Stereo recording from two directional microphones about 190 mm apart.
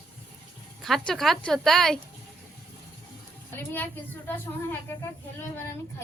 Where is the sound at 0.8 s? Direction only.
Centre (ahead or behind).